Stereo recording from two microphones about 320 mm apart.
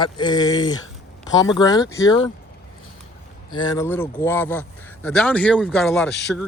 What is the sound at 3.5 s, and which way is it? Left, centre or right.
Speech, centre.